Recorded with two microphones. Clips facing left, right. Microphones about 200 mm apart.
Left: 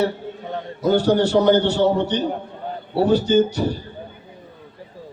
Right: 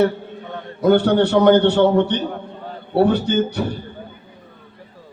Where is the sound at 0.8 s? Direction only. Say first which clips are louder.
Right 3 dB; 60° right (ahead or behind).